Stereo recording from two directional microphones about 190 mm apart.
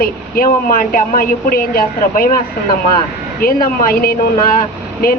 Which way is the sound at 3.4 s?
50° left (ahead or behind).